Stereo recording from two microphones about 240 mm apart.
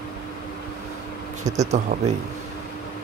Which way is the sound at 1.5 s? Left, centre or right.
Right.